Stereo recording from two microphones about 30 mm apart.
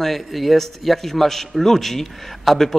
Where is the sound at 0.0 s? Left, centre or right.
Centre.